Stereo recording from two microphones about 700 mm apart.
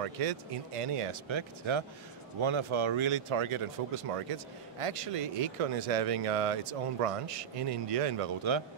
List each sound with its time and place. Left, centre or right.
0.0 s speech: right